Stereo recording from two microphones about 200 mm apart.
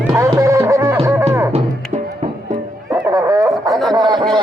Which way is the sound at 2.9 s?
15° right (ahead or behind).